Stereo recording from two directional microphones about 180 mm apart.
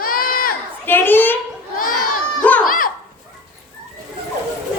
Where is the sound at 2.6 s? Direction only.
50° left (ahead or behind).